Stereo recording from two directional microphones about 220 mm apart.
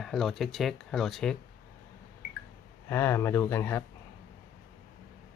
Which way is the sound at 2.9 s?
10° left (ahead or behind).